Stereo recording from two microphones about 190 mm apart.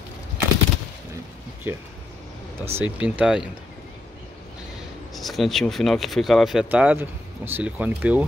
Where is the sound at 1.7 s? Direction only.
10° right (ahead or behind).